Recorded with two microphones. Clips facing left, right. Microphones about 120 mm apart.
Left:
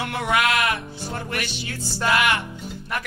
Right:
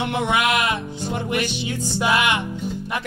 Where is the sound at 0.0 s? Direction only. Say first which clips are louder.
Right 2 dB; 20° right (ahead or behind).